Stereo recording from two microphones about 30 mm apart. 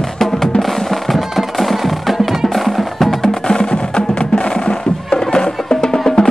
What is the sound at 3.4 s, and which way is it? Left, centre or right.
Music, left.